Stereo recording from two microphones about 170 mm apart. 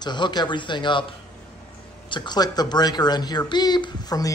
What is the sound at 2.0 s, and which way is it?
Speech, 25° left (ahead or behind).